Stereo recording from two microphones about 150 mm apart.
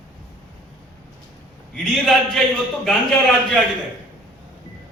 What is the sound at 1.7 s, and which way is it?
A man's voice, centre (ahead or behind).